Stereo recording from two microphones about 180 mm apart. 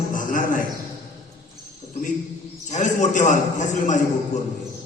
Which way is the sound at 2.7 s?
45° left (ahead or behind).